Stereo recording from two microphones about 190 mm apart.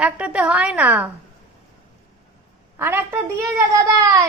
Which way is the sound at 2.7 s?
10° right (ahead or behind).